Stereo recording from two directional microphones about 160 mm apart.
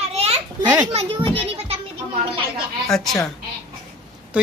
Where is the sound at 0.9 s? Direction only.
35° right (ahead or behind).